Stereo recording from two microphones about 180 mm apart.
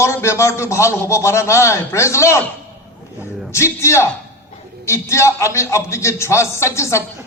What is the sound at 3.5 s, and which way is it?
A man's voice, 15° left (ahead or behind).